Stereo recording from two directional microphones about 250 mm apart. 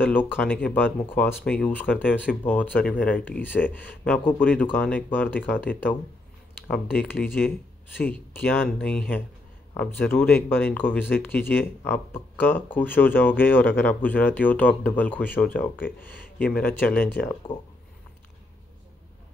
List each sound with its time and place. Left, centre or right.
0.0 s speech: centre